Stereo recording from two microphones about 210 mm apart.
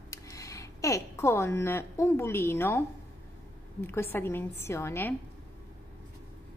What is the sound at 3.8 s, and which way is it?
A woman's voice, 10° left (ahead or behind).